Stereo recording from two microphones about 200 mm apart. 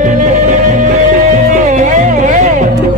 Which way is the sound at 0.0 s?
40° right (ahead or behind).